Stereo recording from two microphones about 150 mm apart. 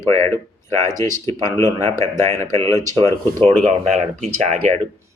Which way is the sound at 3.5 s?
50° right (ahead or behind).